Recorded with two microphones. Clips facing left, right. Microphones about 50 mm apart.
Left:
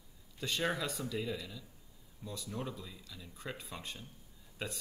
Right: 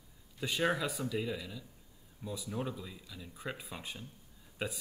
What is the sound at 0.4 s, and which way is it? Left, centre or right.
Speech, centre.